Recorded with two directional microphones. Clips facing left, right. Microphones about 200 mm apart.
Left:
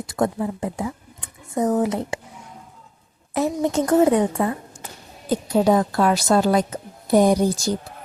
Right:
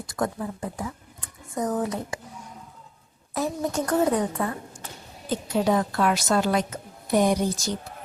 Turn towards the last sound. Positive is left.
turn(degrees=30)  # may be behind; listen again after turning